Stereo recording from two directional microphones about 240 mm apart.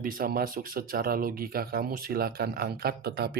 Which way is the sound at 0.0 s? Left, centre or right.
Right.